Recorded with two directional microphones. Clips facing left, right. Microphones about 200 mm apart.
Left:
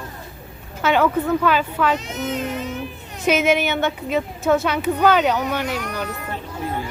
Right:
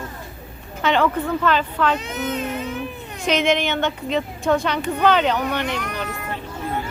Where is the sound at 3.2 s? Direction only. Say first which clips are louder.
Left 2 dB; 5° left (ahead or behind).